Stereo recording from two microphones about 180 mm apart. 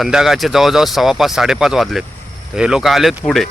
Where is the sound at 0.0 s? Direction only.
Centre (ahead or behind).